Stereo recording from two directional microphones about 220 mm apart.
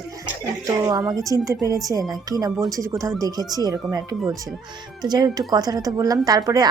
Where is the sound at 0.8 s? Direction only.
15° right (ahead or behind).